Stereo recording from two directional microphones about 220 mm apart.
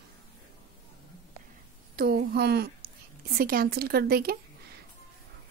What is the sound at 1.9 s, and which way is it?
A woman's voice, 45° right (ahead or behind).